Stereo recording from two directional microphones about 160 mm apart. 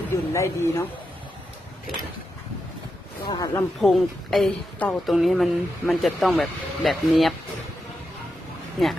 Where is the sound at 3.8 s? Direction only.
Centre (ahead or behind).